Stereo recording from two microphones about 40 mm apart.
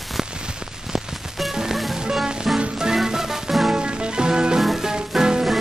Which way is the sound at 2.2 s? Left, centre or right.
Centre.